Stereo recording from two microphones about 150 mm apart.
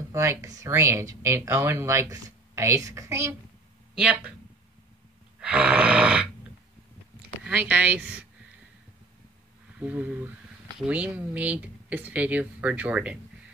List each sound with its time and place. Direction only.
0.1 s speech: 20° right (ahead or behind)
3.9 s speech: 10° right (ahead or behind)
5.4 s grunt: 10° right (ahead or behind)
7.4 s speech: 10° right (ahead or behind)
9.8 s speech: 10° right (ahead or behind)